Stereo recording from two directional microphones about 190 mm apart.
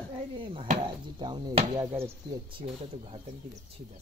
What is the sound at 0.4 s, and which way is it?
Speech, 25° right (ahead or behind).